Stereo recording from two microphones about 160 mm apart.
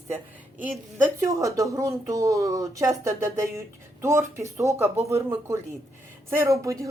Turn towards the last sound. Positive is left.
turn(degrees=-20)  # may be behind; listen again after turning